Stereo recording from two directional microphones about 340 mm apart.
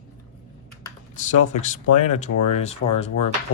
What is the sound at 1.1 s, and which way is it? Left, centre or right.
Speech, left.